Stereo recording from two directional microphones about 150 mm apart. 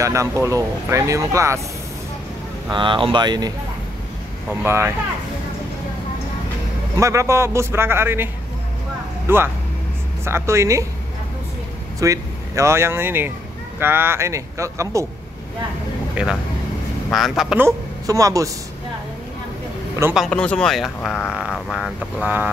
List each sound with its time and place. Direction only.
0.0 s speech: 20° right (ahead or behind)
2.7 s speech: 35° right (ahead or behind)
4.6 s a man's voice: 15° right (ahead or behind)
7.0 s a man's voice: 20° right (ahead or behind)
9.3 s a man's voice: 15° right (ahead or behind)
12.0 s speech: 20° right (ahead or behind)
16.2 s a man's voice: 5° right (ahead or behind)
17.6 s a woman's voice: 20° right (ahead or behind)
20.2 s speech: 5° left (ahead or behind)
21.3 s speech: 5° right (ahead or behind)